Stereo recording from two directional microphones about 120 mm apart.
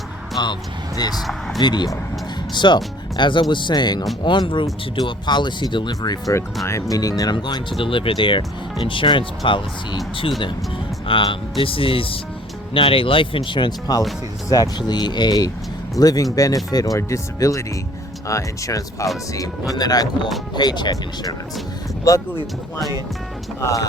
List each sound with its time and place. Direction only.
0.4 s speech: 40° left (ahead or behind)
1.5 s speech: 35° left (ahead or behind)
7.8 s speech: 50° left (ahead or behind)
11.0 s speech: 45° left (ahead or behind); by 22.2 s 25° left (ahead or behind)
23.6 s speech: 25° left (ahead or behind)